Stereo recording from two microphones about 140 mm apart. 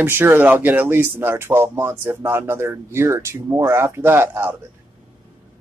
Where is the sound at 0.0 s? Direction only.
15° right (ahead or behind).